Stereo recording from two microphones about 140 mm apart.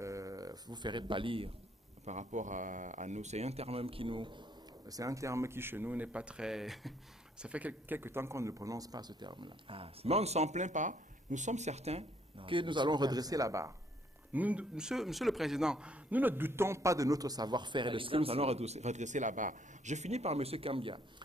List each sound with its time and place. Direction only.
0.0 s a sound: 25° right (ahead or behind); by 1.5 s 40° right (ahead or behind)
2.0 s a man's voice: 60° right (ahead or behind); by 13.7 s 20° right (ahead or behind)
14.3 s a man's voice: 10° right (ahead or behind); by 21.0 s 40° right (ahead or behind)